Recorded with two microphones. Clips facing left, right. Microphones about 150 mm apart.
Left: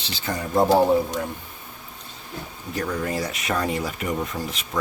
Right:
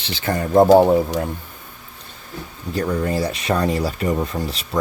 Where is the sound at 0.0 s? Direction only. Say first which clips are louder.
Right 6 dB; 60° right (ahead or behind).